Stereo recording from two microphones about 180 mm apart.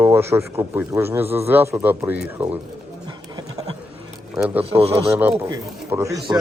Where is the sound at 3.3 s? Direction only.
20° right (ahead or behind).